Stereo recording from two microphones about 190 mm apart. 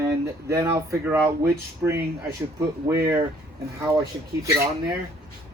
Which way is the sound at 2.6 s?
15° right (ahead or behind).